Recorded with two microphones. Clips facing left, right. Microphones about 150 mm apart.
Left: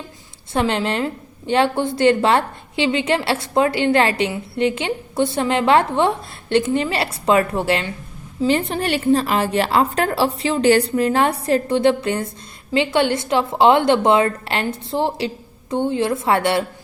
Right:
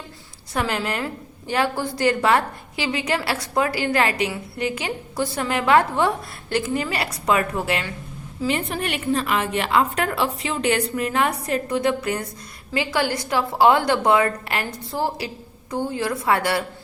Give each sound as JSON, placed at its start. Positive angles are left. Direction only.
{"t": 0.5, "sound": "a woman's voice", "side_deg": 25}